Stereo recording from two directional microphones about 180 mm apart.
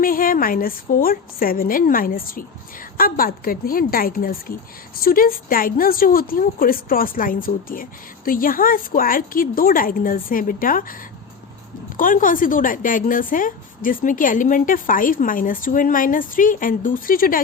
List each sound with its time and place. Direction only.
0.0 s a woman's voice: 50° left (ahead or behind)
11.9 s a woman's voice: 50° left (ahead or behind)